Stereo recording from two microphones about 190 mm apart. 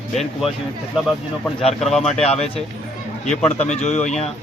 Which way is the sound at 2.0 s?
35° left (ahead or behind).